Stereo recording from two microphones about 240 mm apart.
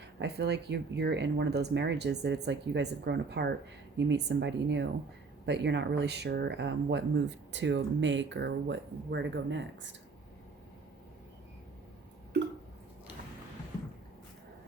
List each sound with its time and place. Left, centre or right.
0.2 s speech: right